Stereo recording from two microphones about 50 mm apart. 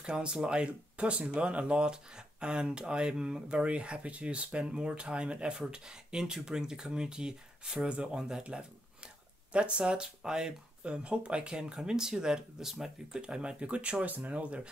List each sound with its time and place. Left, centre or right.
0.0 s speech: centre
13.2 s speech: centre